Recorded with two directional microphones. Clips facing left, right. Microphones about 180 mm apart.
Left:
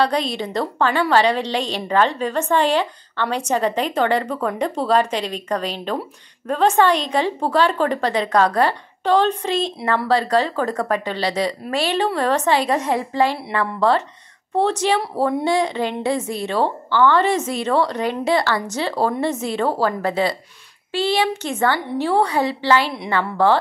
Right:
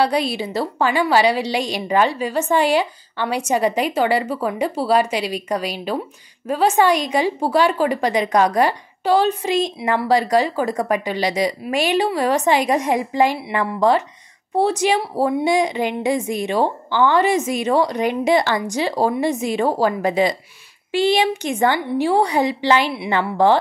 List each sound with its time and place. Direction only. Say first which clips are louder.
0.0 s a woman's voice: right 1 dB; 10° right (ahead or behind)